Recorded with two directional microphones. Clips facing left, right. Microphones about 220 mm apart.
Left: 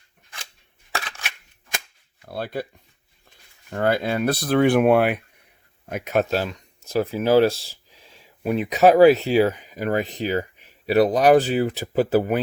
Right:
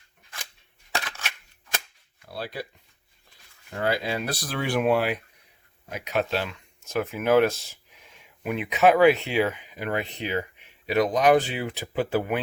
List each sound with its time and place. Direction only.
2.2 s speech: 55° left (ahead or behind)
3.7 s speech: 55° left (ahead or behind)